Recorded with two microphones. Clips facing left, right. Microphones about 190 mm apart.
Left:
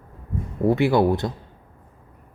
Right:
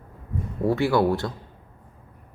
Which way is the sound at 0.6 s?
20° left (ahead or behind).